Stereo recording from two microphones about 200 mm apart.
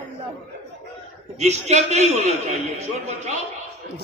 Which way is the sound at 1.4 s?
35° right (ahead or behind).